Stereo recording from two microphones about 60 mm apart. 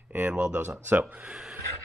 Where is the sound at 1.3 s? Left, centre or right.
Centre.